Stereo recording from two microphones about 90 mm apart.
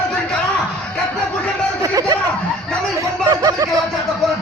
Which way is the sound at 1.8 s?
45° right (ahead or behind).